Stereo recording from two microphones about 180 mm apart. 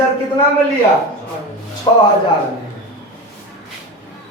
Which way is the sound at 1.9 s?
25° left (ahead or behind).